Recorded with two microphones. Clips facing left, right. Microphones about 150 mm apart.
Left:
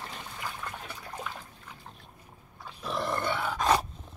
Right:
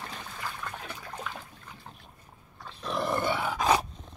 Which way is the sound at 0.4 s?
10° left (ahead or behind).